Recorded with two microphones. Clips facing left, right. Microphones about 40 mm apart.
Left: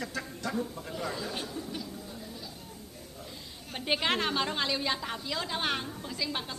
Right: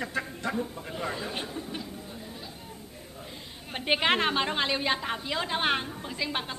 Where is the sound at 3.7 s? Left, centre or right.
Right.